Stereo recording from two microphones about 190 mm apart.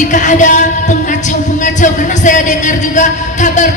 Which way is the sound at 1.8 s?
40° left (ahead or behind).